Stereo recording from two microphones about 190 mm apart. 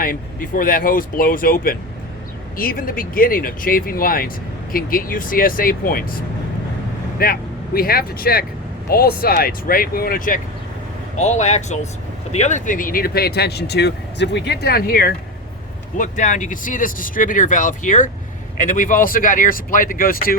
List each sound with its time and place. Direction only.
0.0 s speech: 50° left (ahead or behind)
16.0 s speech: 40° left (ahead or behind)